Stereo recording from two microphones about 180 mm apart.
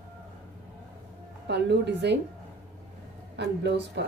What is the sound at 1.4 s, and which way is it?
Speech, 70° right (ahead or behind).